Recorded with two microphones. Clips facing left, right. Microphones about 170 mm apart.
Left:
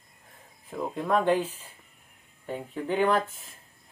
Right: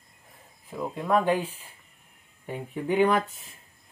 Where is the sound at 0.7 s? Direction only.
Centre (ahead or behind).